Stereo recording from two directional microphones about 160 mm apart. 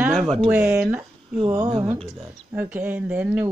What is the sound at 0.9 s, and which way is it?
Speech, 25° right (ahead or behind).